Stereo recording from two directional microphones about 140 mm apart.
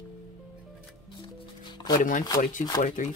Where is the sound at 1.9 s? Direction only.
70° left (ahead or behind).